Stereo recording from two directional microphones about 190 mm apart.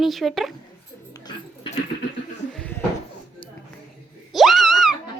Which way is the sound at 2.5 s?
5° left (ahead or behind).